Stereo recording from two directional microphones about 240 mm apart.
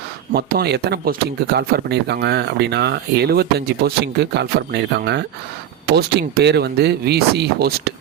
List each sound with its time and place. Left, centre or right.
0.3 s speech: right